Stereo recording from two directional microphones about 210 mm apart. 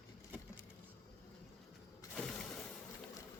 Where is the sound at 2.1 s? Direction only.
Centre (ahead or behind).